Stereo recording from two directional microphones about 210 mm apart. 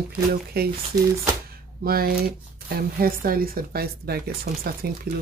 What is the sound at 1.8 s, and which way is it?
Speech, 45° right (ahead or behind).